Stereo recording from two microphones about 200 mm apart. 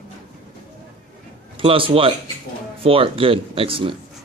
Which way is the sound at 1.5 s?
25° right (ahead or behind).